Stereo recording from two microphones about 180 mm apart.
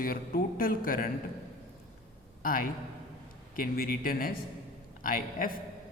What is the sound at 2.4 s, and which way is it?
A man's voice, 50° left (ahead or behind).